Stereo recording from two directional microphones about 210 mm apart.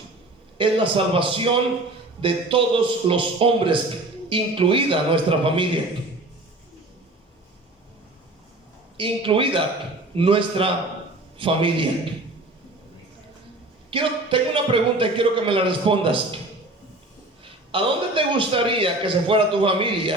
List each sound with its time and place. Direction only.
0.6 s a man's voice: 25° right (ahead or behind)
9.0 s a man's voice: 25° right (ahead or behind)
13.9 s a man's voice: 25° right (ahead or behind)
17.4 s a man's voice: 25° right (ahead or behind)